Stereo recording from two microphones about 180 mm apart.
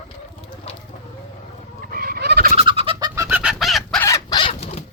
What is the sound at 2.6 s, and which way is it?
Fowl, 30° right (ahead or behind).